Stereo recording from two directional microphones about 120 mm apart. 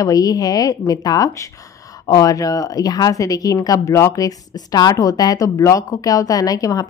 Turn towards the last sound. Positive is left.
turn(degrees=30)  # may be behind; listen again after turning